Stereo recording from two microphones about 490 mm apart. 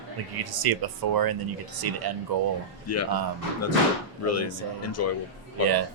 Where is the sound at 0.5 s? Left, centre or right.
Right.